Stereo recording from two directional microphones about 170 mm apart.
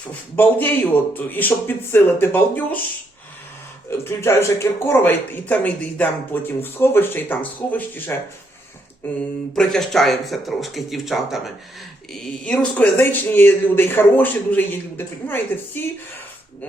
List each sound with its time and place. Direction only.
0.3 s speech: 10° left (ahead or behind)
3.8 s speech: 15° left (ahead or behind)
9.6 s speech: centre (ahead or behind)